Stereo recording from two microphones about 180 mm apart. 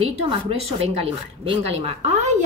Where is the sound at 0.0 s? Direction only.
30° right (ahead or behind).